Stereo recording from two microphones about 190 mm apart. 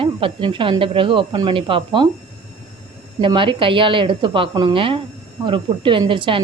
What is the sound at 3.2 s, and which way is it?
A woman's voice, 25° right (ahead or behind).